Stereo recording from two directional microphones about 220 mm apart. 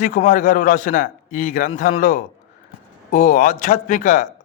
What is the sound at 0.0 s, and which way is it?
A man's voice, 40° left (ahead or behind).